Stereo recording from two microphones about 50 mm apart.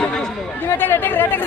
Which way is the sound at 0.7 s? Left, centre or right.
Left.